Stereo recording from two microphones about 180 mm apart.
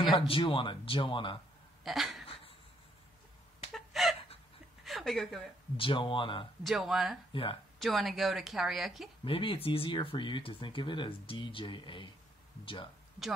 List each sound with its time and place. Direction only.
0.0 s speech: 25° left (ahead or behind)
1.9 s a sound: centre (ahead or behind)
2.2 s a sound: 30° left (ahead or behind)
3.7 s chicken: centre (ahead or behind)
4.8 s a woman's voice: centre (ahead or behind)
5.8 s speech: 30° left (ahead or behind)
6.6 s a woman's voice: centre (ahead or behind)
9.2 s speech: 30° left (ahead or behind)